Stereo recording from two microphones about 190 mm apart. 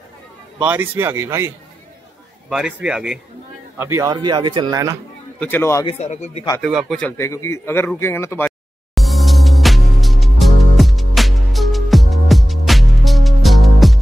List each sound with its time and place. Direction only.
0.7 s speech: 10° right (ahead or behind)
2.5 s speech: 5° right (ahead or behind)
3.8 s speech: 15° right (ahead or behind)
5.4 s a man's voice: 10° left (ahead or behind)
5.9 s speech: 35° left (ahead or behind)
6.6 s a man's voice: centre (ahead or behind)
8.5 s music: centre (ahead or behind)